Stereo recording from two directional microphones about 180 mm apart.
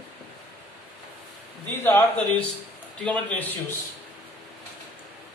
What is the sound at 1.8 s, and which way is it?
A man's voice, 10° left (ahead or behind).